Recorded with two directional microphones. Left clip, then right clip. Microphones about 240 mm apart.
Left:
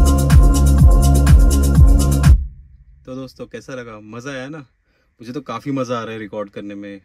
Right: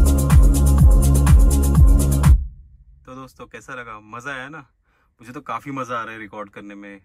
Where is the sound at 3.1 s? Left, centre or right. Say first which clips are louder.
Left 6 dB; centre.